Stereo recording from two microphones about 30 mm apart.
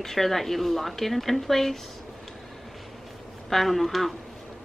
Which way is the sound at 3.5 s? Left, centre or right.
Centre.